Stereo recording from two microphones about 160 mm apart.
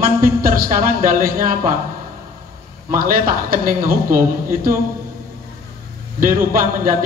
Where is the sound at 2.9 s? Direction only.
65° right (ahead or behind).